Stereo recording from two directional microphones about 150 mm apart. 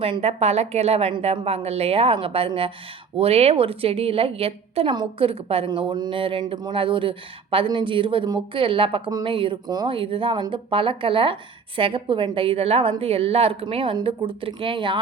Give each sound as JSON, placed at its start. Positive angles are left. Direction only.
{"t": 0.0, "sound": "speech", "side_deg": -40}